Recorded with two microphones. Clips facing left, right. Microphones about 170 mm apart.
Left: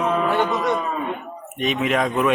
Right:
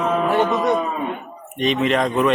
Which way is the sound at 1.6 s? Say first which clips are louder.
Right 2 dB; 5° left (ahead or behind).